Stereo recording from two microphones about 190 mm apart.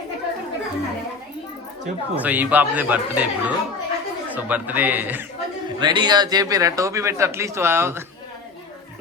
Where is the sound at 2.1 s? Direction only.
10° right (ahead or behind).